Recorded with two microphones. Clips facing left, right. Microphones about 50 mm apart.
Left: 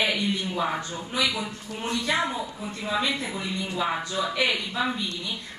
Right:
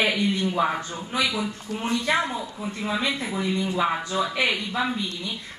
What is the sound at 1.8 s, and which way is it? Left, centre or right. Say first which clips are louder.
Speech: right 3 dB; right.